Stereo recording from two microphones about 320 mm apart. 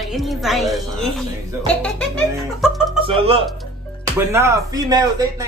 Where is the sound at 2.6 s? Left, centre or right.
Centre.